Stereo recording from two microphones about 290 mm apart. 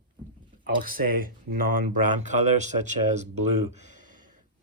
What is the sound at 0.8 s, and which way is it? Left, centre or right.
Speech, right.